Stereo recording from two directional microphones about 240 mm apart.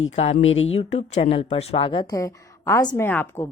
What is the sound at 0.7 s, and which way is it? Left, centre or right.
Speech, left.